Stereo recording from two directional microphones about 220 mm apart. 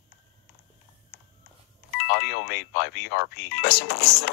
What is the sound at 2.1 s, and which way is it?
Speech, 50° left (ahead or behind).